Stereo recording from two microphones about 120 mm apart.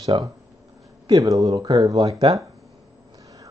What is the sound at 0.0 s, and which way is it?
Speech, 35° right (ahead or behind).